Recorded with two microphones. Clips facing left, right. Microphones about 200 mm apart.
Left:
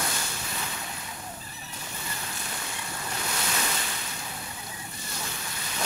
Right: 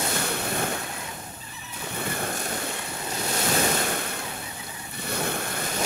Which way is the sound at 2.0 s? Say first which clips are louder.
Right 11 dB; 55° right (ahead or behind).